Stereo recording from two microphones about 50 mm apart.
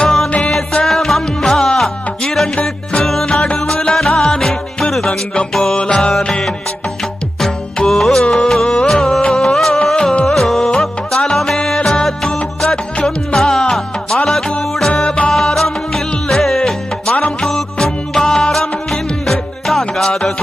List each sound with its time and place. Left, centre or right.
0.0 s music: centre
0.3 s music: left
0.9 s music: centre
3.9 s music: centre
5.7 s music: centre
7.9 s music: centre
12.4 s music: left